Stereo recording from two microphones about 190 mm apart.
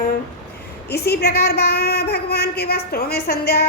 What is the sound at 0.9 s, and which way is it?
A woman's voice, 55° left (ahead or behind).